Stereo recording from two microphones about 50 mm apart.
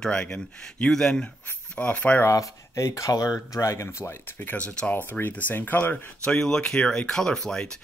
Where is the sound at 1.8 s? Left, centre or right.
Left.